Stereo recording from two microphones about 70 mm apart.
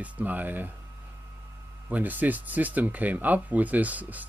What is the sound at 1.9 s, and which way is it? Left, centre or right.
Speech, right.